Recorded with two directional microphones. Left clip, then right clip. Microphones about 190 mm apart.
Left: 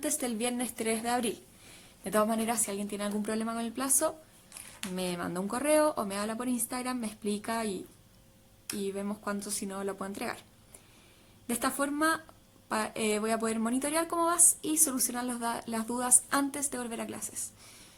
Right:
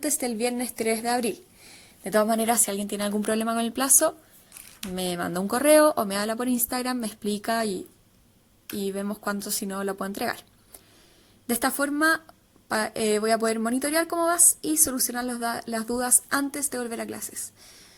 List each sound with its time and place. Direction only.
0.0 s a woman's voice: 25° right (ahead or behind)
8.8 s a woman's voice: 35° right (ahead or behind)
11.4 s a woman's voice: 30° right (ahead or behind)